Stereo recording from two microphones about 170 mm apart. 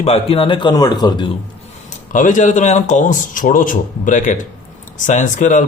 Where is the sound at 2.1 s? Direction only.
45° left (ahead or behind).